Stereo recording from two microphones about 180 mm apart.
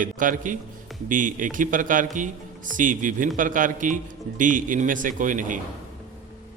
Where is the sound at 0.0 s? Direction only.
45° right (ahead or behind).